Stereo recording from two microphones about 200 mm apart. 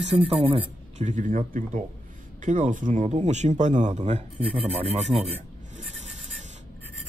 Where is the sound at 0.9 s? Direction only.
35° right (ahead or behind).